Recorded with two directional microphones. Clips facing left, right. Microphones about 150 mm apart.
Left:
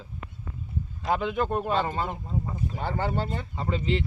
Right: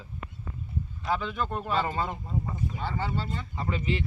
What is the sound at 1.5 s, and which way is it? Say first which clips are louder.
Speech: left 3 dB; 20° left (ahead or behind).